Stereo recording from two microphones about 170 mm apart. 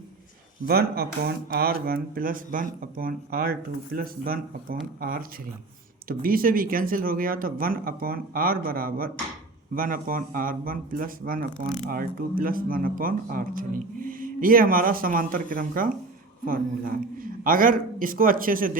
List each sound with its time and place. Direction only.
0.6 s speech: 65° right (ahead or behind)
17.4 s speech: 55° right (ahead or behind)